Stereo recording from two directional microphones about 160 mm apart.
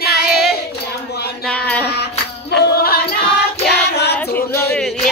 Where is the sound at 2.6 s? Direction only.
70° left (ahead or behind).